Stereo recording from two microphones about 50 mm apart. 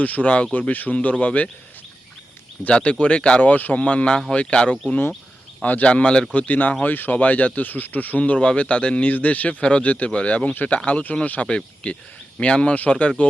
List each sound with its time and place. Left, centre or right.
0.0 s speech: left
2.6 s speech: left
3.4 s speech: left
6.3 s speech: left